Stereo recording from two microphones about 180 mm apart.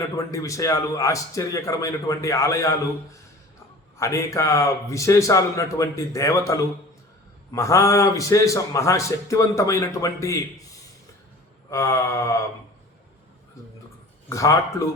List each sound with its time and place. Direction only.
0.3 s a man's voice: 15° left (ahead or behind)
14.3 s a man's voice: 15° left (ahead or behind)